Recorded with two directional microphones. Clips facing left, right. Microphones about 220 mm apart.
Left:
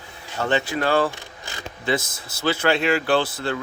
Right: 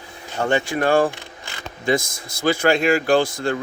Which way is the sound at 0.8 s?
45° right (ahead or behind).